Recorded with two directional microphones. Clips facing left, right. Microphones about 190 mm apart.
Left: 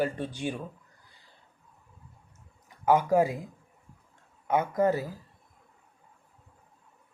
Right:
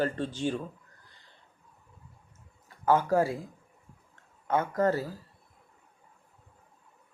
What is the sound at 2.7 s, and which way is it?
Speech, 15° left (ahead or behind).